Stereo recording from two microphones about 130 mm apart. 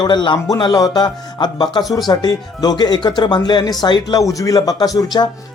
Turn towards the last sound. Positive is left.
turn(degrees=30)  # may be behind; listen again after turning